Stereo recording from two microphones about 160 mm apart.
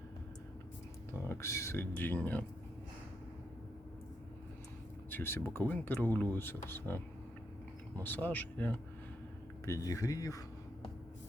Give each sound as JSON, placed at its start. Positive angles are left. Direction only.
{"t": 1.1, "sound": "speech", "side_deg": 15}
{"t": 5.1, "sound": "speech", "side_deg": 15}